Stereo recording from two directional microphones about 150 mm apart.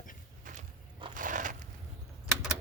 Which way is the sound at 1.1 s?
60° right (ahead or behind).